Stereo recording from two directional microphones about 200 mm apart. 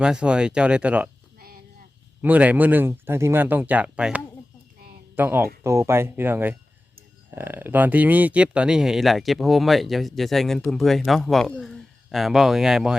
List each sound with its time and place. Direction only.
0.0 s speech: 5° right (ahead or behind)
1.4 s a sound: 45° right (ahead or behind)
2.2 s speech: 5° right (ahead or behind)